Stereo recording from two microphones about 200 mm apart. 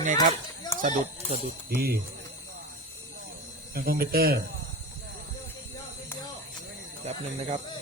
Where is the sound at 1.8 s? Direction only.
50° right (ahead or behind).